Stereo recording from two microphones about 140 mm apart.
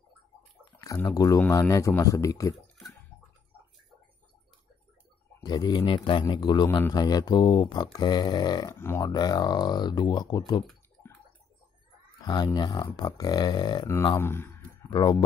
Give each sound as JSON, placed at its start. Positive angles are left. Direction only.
{"t": 1.1, "sound": "speech", "side_deg": 25}
{"t": 5.4, "sound": "speech", "side_deg": 30}
{"t": 8.7, "sound": "speech", "side_deg": 15}
{"t": 9.0, "sound": "speech", "side_deg": 30}
{"t": 12.2, "sound": "speech", "side_deg": 30}
{"t": 14.0, "sound": "speech", "side_deg": 20}
{"t": 14.9, "sound": "speech", "side_deg": 30}